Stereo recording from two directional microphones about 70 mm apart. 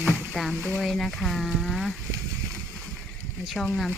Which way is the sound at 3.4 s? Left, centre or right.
Centre.